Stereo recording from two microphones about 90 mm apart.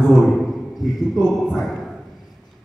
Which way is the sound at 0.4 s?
Centre (ahead or behind).